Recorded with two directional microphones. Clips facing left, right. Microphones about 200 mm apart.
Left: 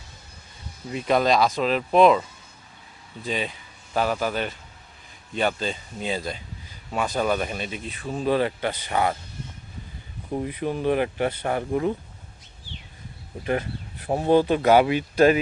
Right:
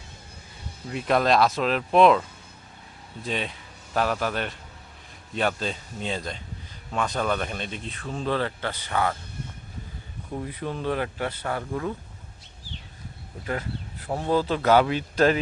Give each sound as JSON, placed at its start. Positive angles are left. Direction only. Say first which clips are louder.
{"t": 0.9, "sound": "speech", "louder": "left 1 dB", "side_deg": 0}
{"t": 3.2, "sound": "speech", "louder": "left 2 dB", "side_deg": 0}
{"t": 10.3, "sound": "speech", "louder": "left 5 dB", "side_deg": 15}
{"t": 13.4, "sound": "speech", "louder": "left 5 dB", "side_deg": 20}